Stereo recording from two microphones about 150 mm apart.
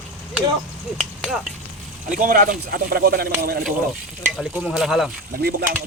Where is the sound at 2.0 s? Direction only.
60° right (ahead or behind); by 3.7 s 85° right.